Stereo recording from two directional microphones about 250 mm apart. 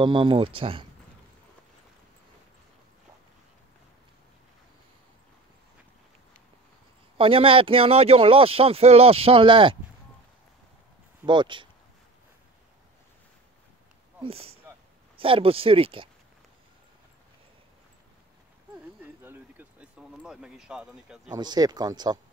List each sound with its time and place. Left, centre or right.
0.0 s speech: centre
7.2 s speech: right
11.2 s speech: centre
14.2 s speech: right
19.2 s a sound: centre
21.4 s speech: centre